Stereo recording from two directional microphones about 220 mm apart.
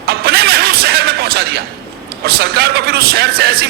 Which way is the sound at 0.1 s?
45° right (ahead or behind).